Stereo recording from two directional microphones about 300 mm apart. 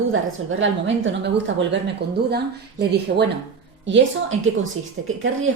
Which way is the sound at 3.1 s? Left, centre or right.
Right.